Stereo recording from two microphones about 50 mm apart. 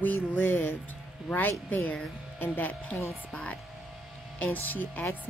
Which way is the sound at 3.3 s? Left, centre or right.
Left.